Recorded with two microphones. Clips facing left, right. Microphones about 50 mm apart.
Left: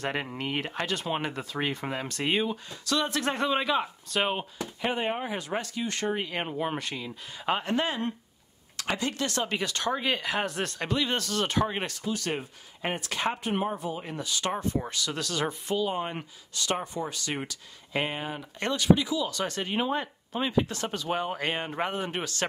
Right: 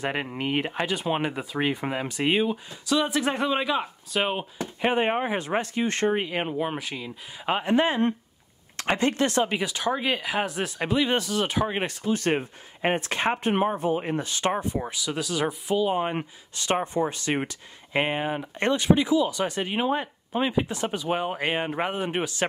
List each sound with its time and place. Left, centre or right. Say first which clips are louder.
0.0 s speech: right 3 dB; centre
4.6 s speech: right 6 dB; right
6.3 s speech: right 3 dB; centre; by 8.1 s right
8.7 s speech: right 6 dB; right
9.5 s speech: right 3 dB; centre
12.1 s speech: right 8 dB; right
14.5 s speech: right 2 dB; centre; by 19.2 s right
19.2 s speech: right 4 dB; centre